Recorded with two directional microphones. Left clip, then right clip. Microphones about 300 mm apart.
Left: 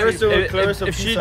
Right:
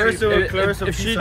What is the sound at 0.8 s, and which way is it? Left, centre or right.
Speech, centre.